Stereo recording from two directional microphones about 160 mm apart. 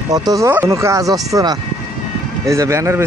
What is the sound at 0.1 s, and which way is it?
A man's voice, 25° right (ahead or behind).